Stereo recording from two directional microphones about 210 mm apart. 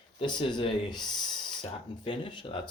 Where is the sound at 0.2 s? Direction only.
20° left (ahead or behind).